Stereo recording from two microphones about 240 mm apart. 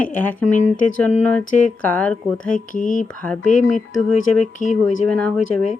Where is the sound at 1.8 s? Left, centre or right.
Centre.